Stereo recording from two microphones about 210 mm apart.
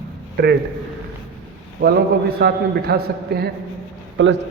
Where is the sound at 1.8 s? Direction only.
45° right (ahead or behind).